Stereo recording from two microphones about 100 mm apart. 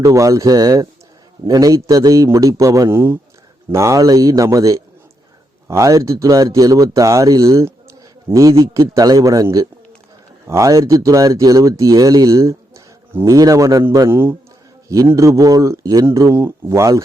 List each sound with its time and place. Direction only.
0.0 s speech: 30° right (ahead or behind)
14.1 s a man's voice: 25° right (ahead or behind)
15.1 s speech: 35° right (ahead or behind)